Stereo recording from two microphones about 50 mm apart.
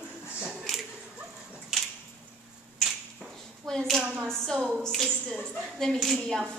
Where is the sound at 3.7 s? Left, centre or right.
Centre.